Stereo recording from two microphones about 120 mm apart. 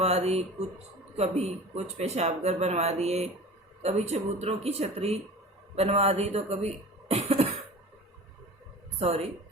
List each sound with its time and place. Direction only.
0.0 s speech: 60° right (ahead or behind)
9.0 s a woman's voice: 60° right (ahead or behind)